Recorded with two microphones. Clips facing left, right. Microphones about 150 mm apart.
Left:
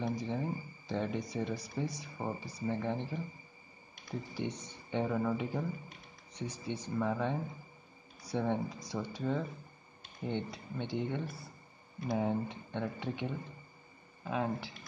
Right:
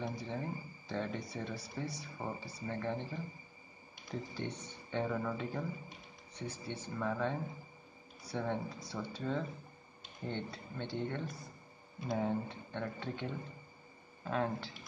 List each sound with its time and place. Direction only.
0.0 s speech: 15° left (ahead or behind)